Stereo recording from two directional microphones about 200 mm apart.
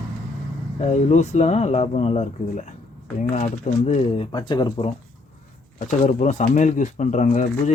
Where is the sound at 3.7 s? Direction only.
40° left (ahead or behind).